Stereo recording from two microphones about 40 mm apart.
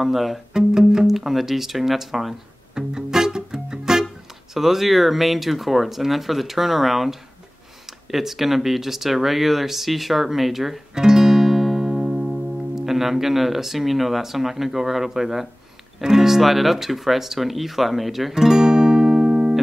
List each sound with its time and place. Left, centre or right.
0.0 s speech: centre
0.5 s music: centre
2.7 s music: centre
4.6 s speech: centre
11.0 s music: centre
16.0 s speech: centre
18.3 s guitar: centre